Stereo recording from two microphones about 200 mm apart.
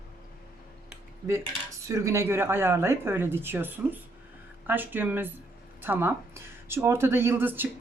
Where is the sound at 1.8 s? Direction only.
15° right (ahead or behind).